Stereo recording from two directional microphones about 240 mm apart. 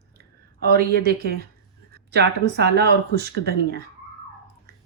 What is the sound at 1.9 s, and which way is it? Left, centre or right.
Speech, right.